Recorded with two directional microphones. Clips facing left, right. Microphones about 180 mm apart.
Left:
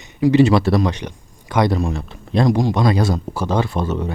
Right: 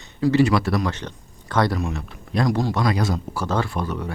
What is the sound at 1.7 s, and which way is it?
Speech, 30° left (ahead or behind).